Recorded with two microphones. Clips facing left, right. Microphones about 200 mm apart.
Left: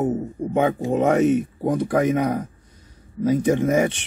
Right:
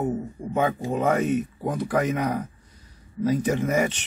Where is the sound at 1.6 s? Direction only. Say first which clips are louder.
Left 5 dB; 15° left (ahead or behind).